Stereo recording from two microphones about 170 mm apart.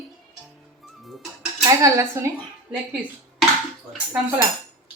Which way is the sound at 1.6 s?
20° right (ahead or behind).